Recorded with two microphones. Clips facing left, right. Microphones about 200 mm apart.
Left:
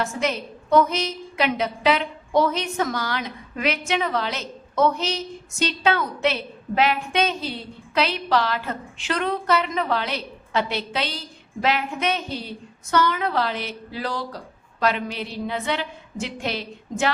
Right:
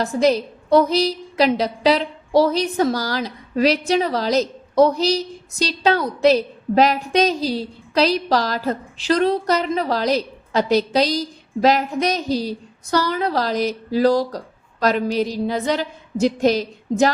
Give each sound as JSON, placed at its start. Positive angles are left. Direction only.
{"t": 0.0, "sound": "a woman's voice", "side_deg": -35}